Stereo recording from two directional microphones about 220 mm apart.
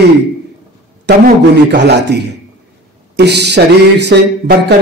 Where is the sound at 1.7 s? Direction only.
50° right (ahead or behind).